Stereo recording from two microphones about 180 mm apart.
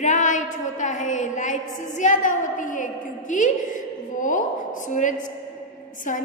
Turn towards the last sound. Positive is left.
turn(degrees=45)  # may be behind; listen again after turning